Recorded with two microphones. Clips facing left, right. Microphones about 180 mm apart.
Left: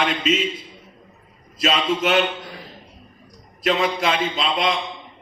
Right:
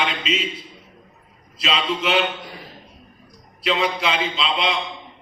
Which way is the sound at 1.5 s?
45° left (ahead or behind).